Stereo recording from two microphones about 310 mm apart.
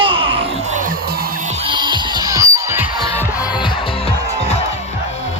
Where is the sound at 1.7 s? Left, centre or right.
Centre.